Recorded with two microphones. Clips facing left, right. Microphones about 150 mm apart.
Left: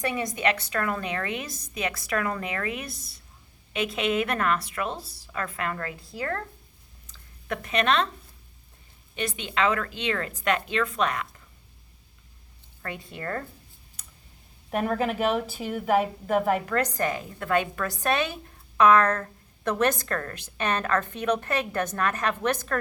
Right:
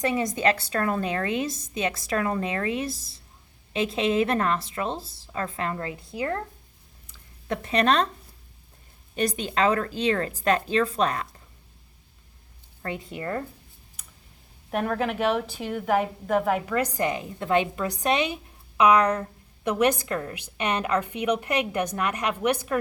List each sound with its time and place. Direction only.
0.0 s a woman's voice: 25° right (ahead or behind)
7.4 s a woman's voice: 30° right (ahead or behind)
9.1 s a woman's voice: 40° right (ahead or behind)
12.8 s a woman's voice: 25° right (ahead or behind)
14.7 s a woman's voice: centre (ahead or behind)